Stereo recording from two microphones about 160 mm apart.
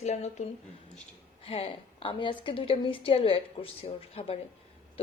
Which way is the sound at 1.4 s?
35° left (ahead or behind).